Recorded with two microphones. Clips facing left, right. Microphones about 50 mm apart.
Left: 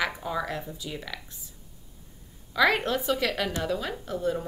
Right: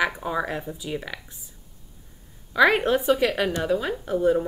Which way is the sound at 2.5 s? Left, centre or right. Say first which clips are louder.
Right 5 dB; right.